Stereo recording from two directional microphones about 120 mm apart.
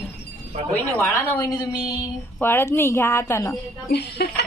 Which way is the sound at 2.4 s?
20° left (ahead or behind).